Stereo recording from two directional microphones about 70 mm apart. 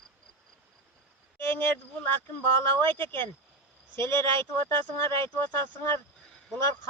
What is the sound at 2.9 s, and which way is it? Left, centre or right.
Speech, left.